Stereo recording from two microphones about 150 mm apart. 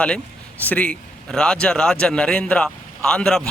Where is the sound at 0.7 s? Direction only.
10° left (ahead or behind).